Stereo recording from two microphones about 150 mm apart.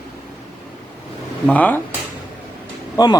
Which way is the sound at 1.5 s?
10° left (ahead or behind).